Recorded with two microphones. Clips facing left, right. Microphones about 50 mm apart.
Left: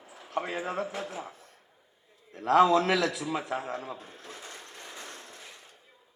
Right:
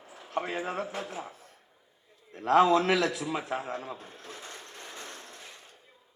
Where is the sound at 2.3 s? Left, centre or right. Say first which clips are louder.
Left 1 dB; right.